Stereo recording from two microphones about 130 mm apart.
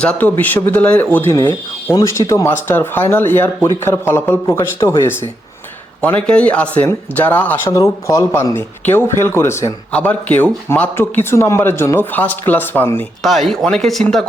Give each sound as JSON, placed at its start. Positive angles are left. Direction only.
{"t": 0.0, "sound": "speech", "side_deg": 10}
{"t": 6.0, "sound": "speech", "side_deg": 10}
{"t": 7.7, "sound": "speech", "side_deg": 25}
{"t": 9.9, "sound": "speech", "side_deg": 10}
{"t": 13.2, "sound": "speech", "side_deg": 0}